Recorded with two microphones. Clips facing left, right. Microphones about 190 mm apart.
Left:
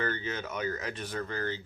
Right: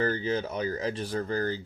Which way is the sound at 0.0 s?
35° right (ahead or behind).